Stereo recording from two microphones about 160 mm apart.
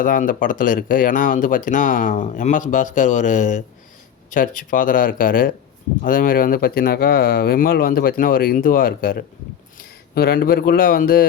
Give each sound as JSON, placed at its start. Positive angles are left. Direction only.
{"t": 0.0, "sound": "speech", "side_deg": 60}